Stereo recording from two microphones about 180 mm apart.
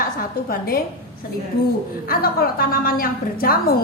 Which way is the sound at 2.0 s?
55° left (ahead or behind).